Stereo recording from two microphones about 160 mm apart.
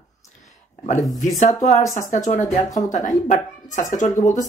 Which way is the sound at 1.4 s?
50° left (ahead or behind).